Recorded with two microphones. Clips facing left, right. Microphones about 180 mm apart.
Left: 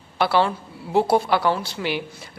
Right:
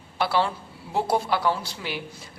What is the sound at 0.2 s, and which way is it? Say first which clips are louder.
A woman's voice: left 4 dB; 70° left (ahead or behind).